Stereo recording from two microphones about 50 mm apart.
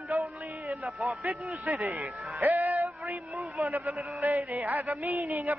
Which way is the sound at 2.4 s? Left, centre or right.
Right.